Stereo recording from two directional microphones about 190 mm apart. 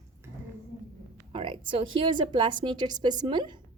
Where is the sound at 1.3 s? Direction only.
30° right (ahead or behind).